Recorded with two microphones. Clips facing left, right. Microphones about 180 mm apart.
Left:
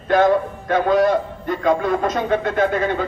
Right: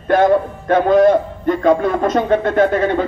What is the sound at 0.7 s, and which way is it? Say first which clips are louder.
A man's voice: right 5 dB; 50° right (ahead or behind).